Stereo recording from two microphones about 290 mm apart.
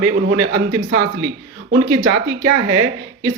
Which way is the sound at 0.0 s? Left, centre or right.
Right.